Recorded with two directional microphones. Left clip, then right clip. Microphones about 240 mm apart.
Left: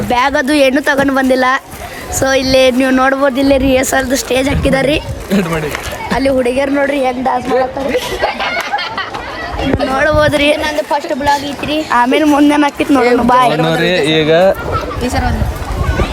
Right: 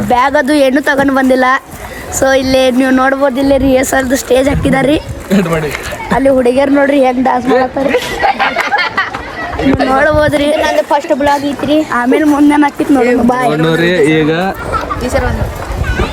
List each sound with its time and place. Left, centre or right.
0.1 s speech: centre
6.4 s a woman's voice: centre
7.9 s speech: centre
9.7 s speech: centre
10.5 s a woman's voice: right
11.9 s speech: centre
14.2 s speech: left